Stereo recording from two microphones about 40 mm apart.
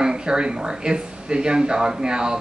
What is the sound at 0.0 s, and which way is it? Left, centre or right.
Speech, centre.